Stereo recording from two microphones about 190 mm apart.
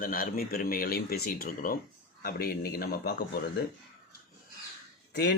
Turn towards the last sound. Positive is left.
turn(degrees=65)  # may be behind; listen again after turning